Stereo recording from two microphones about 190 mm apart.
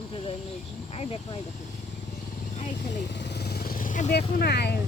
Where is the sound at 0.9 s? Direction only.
30° left (ahead or behind).